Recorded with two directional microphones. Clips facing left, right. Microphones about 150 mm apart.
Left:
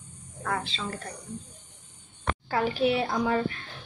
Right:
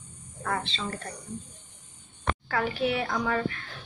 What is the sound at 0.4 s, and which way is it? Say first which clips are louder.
Speech: even; centre (ahead or behind).